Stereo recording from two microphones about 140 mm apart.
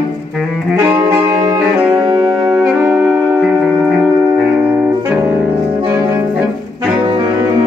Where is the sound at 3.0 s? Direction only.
15° right (ahead or behind).